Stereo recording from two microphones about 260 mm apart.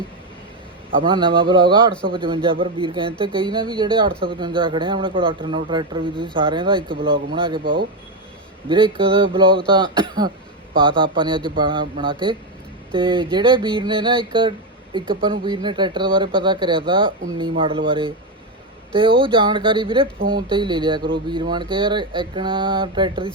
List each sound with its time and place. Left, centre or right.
1.0 s a man's voice: centre